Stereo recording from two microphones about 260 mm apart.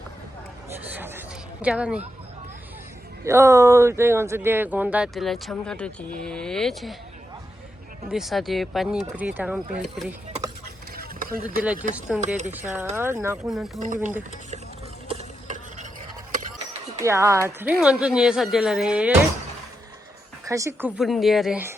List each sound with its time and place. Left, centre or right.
0.9 s a sound: centre
1.6 s a woman's voice: centre
3.2 s a woman's voice: centre
8.1 s a woman's voice: centre
10.9 s a sound: right
11.6 s a woman's voice: centre
13.7 s speech: right
15.1 s stir: right
17.0 s a woman's voice: centre
20.5 s a woman's voice: centre